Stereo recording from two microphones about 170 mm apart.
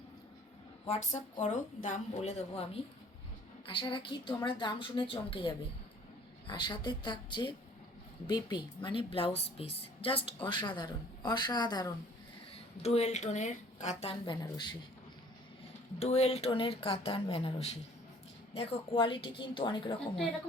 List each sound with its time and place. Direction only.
0.9 s a woman's voice: 40° left (ahead or behind)
3.7 s a woman's voice: 30° left (ahead or behind)
12.8 s a woman's voice: 40° left (ahead or behind)
14.4 s a woman's voice: 25° left (ahead or behind)
16.0 s a woman's voice: 40° left (ahead or behind)